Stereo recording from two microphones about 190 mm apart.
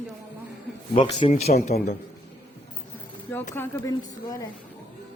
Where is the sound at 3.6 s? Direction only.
10° left (ahead or behind).